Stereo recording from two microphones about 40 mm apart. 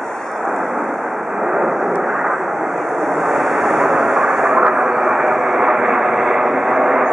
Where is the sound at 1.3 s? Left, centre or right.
Centre.